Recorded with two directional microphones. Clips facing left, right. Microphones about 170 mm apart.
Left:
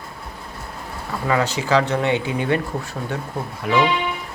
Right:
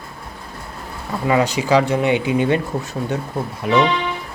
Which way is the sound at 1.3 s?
15° right (ahead or behind).